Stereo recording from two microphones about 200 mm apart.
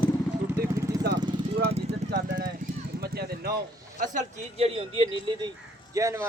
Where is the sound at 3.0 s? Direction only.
50° right (ahead or behind).